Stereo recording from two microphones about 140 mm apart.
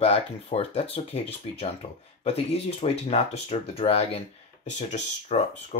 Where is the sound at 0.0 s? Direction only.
45° left (ahead or behind).